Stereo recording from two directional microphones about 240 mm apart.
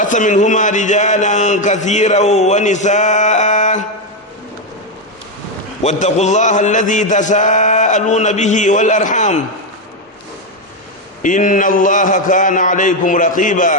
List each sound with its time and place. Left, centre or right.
0.0 s a man's voice: left
5.8 s a man's voice: left
11.2 s a man's voice: left